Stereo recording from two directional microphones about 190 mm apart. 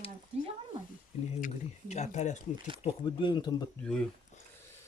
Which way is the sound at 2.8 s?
25° left (ahead or behind).